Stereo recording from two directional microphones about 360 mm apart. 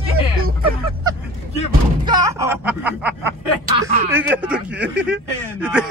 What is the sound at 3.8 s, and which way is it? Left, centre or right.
Speech, centre.